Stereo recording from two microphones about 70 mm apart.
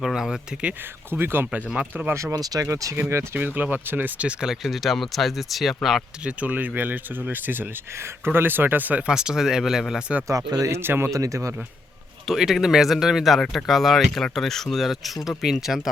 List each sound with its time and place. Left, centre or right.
0.0 s speech: centre
1.1 s speech: right
2.3 s speech: right
2.9 s speech: right
3.3 s speech: right
4.2 s speech: centre
4.6 s speech: centre
6.2 s speech: right
9.0 s speech: centre
10.2 s speech: right
10.7 s speech: right
11.1 s speech: right
12.3 s speech: centre